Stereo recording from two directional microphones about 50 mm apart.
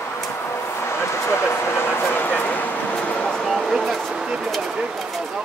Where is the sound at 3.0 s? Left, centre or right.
Left.